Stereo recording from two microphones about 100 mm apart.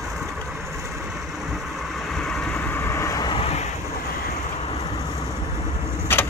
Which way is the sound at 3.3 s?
90° left.